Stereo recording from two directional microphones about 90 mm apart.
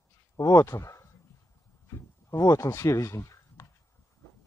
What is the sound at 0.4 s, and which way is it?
Speech, 35° left (ahead or behind).